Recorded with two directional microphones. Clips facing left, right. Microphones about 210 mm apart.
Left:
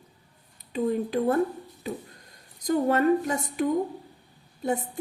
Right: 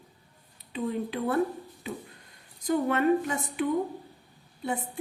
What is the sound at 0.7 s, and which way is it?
Speech, 40° left (ahead or behind).